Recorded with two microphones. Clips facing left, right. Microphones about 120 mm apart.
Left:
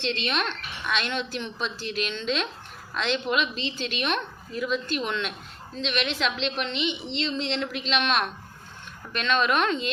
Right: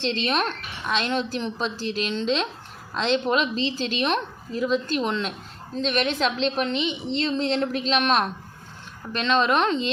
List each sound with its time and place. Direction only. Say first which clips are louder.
0.0 s a woman's voice: right 4 dB; 40° right (ahead or behind)